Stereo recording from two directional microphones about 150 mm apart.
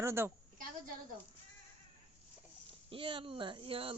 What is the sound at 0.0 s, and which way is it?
Speech, 15° right (ahead or behind).